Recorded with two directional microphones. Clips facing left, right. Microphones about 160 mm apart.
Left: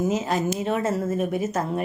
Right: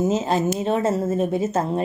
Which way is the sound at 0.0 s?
25° right (ahead or behind).